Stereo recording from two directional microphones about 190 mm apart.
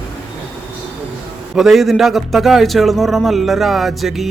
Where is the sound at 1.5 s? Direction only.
Centre (ahead or behind).